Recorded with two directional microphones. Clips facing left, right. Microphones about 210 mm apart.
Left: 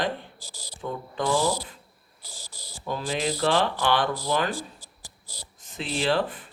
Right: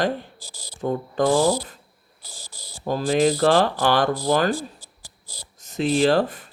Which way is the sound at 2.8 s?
40° right (ahead or behind).